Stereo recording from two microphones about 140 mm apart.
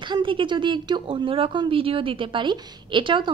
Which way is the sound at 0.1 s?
35° right (ahead or behind).